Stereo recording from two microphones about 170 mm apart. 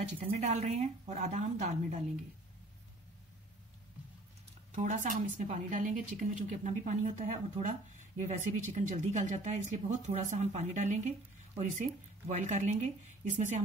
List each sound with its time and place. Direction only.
0.2 s a woman's voice: 40° right (ahead or behind)
4.7 s a woman's voice: 50° right (ahead or behind)